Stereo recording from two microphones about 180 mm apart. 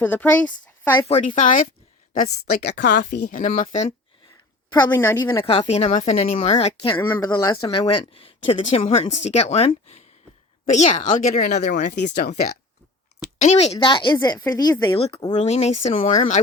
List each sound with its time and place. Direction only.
0.0 s speech: 10° left (ahead or behind)
0.9 s speech: 35° left (ahead or behind)
3.0 s speech: 65° left (ahead or behind)
3.2 s speech: 45° left (ahead or behind)
4.9 s a woman's voice: 15° left (ahead or behind); by 11.6 s 40° left (ahead or behind)
12.0 s speech: 60° left (ahead or behind)
13.4 s a woman's voice: 35° left (ahead or behind)